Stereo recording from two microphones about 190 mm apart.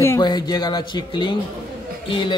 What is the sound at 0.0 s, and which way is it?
Speech, 15° left (ahead or behind).